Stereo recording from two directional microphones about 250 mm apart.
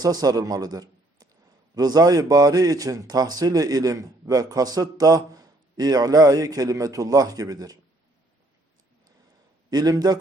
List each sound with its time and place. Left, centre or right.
0.0 s a man's voice: centre
9.6 s a man's voice: centre